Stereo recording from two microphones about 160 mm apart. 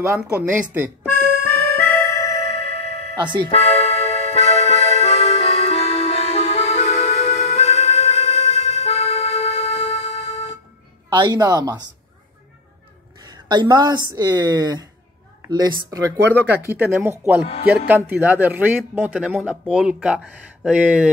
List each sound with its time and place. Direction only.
0.2 s speech: 10° right (ahead or behind)
1.4 s music: 15° left (ahead or behind)
2.3 s music: 40° left (ahead or behind)
11.1 s speech: 25° right (ahead or behind)
13.3 s speech: 25° right (ahead or behind); by 21.1 s 10° right (ahead or behind)